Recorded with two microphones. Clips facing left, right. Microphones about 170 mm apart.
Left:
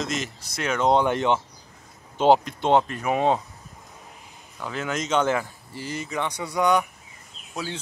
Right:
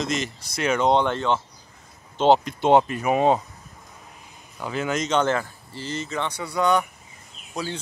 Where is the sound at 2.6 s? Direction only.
10° right (ahead or behind).